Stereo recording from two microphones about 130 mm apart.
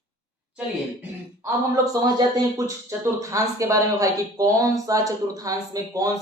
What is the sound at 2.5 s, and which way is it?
Speech, 25° right (ahead or behind).